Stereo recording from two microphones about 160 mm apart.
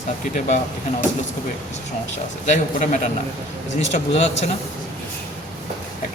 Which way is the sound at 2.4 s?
50° left (ahead or behind).